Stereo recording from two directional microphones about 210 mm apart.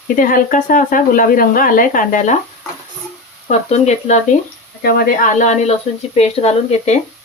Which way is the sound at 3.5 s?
30° left (ahead or behind).